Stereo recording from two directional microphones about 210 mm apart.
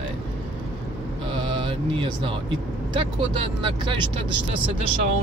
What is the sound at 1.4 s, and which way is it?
Speech, 25° right (ahead or behind).